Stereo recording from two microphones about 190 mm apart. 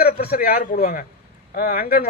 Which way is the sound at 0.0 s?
55° left (ahead or behind).